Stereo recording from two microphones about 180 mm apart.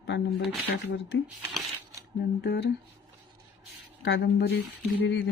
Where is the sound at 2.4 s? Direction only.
65° left (ahead or behind).